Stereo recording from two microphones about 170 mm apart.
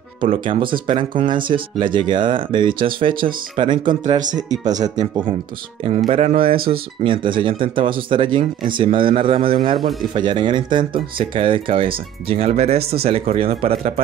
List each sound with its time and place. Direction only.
0.2 s speech: 30° right (ahead or behind)
6.5 s speech: 60° right (ahead or behind)
7.0 s speech: 30° right (ahead or behind)